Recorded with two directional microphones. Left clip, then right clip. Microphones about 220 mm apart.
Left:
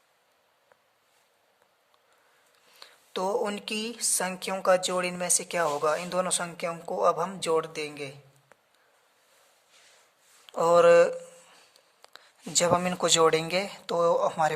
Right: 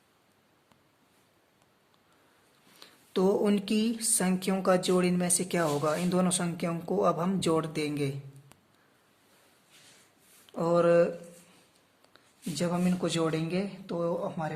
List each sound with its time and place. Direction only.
2.8 s a woman's voice: 15° left (ahead or behind)
10.4 s speech: 25° left (ahead or behind)